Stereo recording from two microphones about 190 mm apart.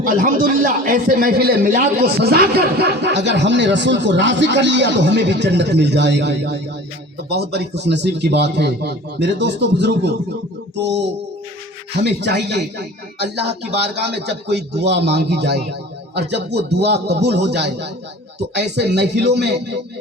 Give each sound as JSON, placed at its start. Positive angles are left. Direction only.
{"t": 0.0, "sound": "a man's voice", "side_deg": -45}